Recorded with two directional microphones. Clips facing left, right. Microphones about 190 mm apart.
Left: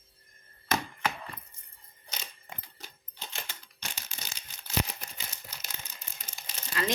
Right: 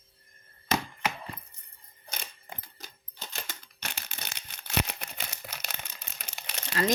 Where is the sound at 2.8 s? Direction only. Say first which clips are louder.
Even; 40° right (ahead or behind).